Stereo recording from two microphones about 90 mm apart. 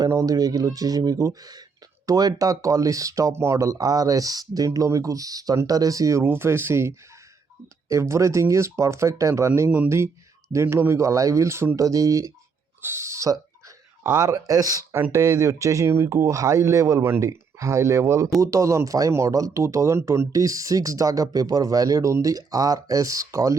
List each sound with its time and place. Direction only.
0.0 s speech: 40° right (ahead or behind)
6.2 s speech: 25° right (ahead or behind)
10.5 s speech: 30° right (ahead or behind)